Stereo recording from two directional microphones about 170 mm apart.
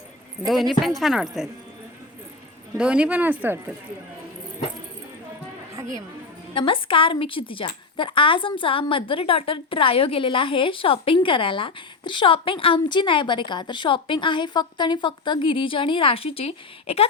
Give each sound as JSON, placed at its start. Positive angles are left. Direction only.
{"t": 0.4, "sound": "speech", "side_deg": 0}
{"t": 2.7, "sound": "speech", "side_deg": -5}
{"t": 6.5, "sound": "a woman's voice", "side_deg": 30}